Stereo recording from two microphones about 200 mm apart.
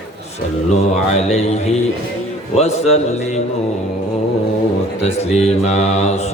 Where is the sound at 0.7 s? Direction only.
35° left (ahead or behind).